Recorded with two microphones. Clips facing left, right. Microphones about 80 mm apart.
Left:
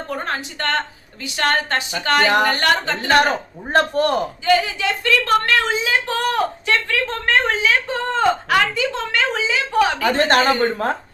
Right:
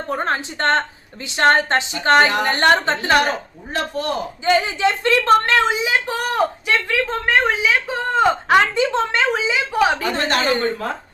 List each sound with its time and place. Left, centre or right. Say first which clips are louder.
0.1 s a woman's voice: right 5 dB; right
3.7 s a woman's voice: left 7 dB; left
4.4 s speech: right 2 dB; right
8.3 s a woman's voice: right 2 dB; right
10.0 s a woman's voice: left 4 dB; left